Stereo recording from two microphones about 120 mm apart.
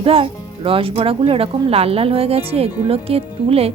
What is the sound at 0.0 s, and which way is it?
A woman's voice, 50° right (ahead or behind).